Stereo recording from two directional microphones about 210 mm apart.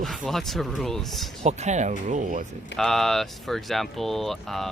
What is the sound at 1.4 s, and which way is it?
Speech, 35° right (ahead or behind).